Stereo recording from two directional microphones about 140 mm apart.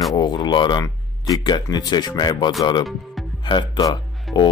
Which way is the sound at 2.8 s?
Centre (ahead or behind).